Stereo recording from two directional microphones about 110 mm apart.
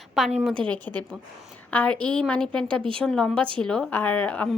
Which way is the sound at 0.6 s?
10° left (ahead or behind).